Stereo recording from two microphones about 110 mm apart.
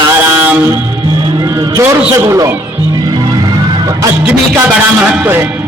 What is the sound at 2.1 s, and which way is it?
Music, 25° right (ahead or behind).